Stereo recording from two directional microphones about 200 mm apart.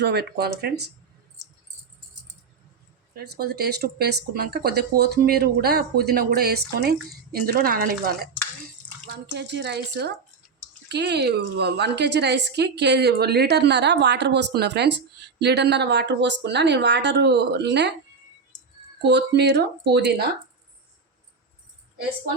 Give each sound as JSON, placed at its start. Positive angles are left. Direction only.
{"t": 0.0, "sound": "a woman's voice", "side_deg": -55}
{"t": 3.2, "sound": "speech", "side_deg": -50}
{"t": 9.0, "sound": "a woman's voice", "side_deg": -55}
{"t": 19.0, "sound": "a woman's voice", "side_deg": -60}